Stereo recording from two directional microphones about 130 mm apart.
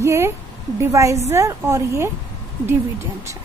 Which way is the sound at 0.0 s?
20° right (ahead or behind).